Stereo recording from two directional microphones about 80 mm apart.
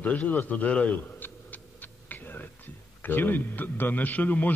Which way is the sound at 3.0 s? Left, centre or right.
Left.